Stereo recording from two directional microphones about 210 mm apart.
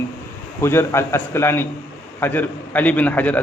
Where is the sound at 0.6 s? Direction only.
10° left (ahead or behind).